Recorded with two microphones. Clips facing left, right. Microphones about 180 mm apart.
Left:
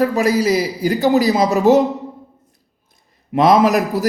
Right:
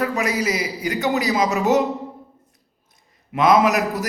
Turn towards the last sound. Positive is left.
turn(degrees=35)  # may be behind; listen again after turning